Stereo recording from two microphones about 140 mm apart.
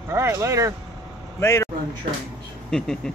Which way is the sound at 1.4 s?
20° left (ahead or behind).